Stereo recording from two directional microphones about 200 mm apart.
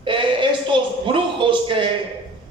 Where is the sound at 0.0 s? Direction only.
25° right (ahead or behind).